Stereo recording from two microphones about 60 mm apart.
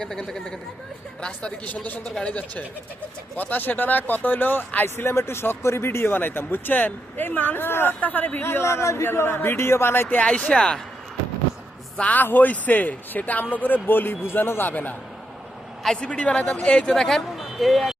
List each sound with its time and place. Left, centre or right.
0.0 s a man's voice: centre; by 8.4 s left
8.4 s a man's voice: left
9.0 s speech: left
10.2 s speech: centre
11.9 s a man's voice: left
16.0 s speech: centre
17.3 s vehicle: centre